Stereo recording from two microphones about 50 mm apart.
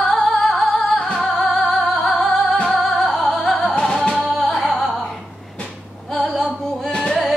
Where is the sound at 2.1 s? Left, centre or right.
Left.